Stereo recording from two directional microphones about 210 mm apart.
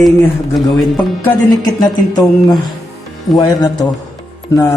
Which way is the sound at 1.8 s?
20° left (ahead or behind).